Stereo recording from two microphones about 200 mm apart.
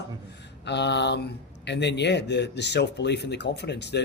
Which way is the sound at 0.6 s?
60° left (ahead or behind).